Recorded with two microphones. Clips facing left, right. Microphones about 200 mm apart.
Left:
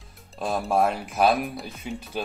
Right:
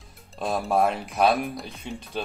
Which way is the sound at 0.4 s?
Centre (ahead or behind).